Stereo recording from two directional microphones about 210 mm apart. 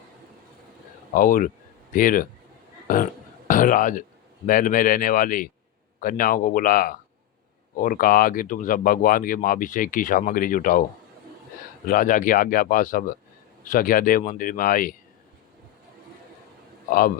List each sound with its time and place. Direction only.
1.1 s speech: 40° left (ahead or behind)
2.8 s a sound: 40° left (ahead or behind)
4.4 s speech: 40° left (ahead or behind)
11.9 s speech: 40° left (ahead or behind)